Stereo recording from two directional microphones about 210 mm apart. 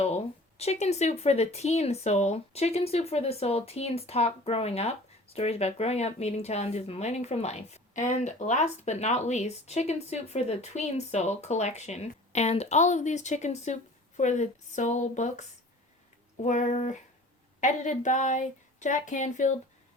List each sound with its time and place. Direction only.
0.0 s speech: 30° left (ahead or behind)